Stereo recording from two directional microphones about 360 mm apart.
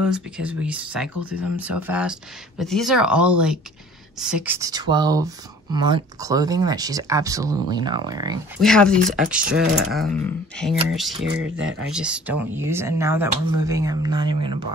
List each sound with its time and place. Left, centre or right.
0.0 s speech: centre
8.5 s speech: centre
11.4 s speech: right
11.9 s speech: centre